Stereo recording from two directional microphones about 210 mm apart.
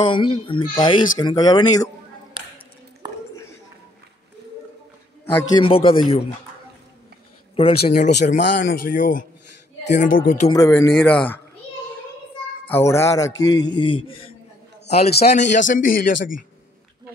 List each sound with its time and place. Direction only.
0.0 s speech: 25° left (ahead or behind)
5.6 s speech: 25° left (ahead or behind)
7.5 s a man's voice: 25° left (ahead or behind)
10.5 s speech: 15° left (ahead or behind)
12.6 s a man's voice: 10° left (ahead or behind); by 16.2 s 40° left (ahead or behind)